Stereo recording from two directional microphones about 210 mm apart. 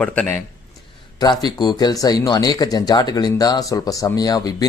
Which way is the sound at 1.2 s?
20° left (ahead or behind).